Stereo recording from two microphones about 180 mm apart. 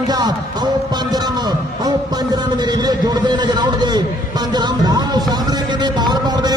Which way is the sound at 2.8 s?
25° right (ahead or behind).